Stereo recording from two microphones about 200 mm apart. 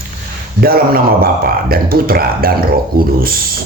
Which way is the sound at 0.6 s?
50° right (ahead or behind).